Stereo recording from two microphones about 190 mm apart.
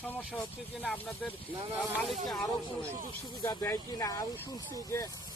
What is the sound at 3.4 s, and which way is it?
Speech, 15° left (ahead or behind).